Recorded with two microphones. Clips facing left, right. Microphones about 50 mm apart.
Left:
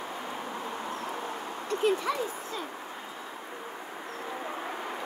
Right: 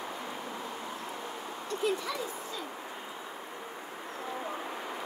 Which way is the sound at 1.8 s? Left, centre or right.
Left.